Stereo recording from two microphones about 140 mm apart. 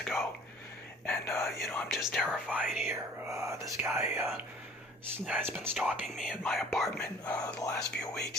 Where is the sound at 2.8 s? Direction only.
20° right (ahead or behind).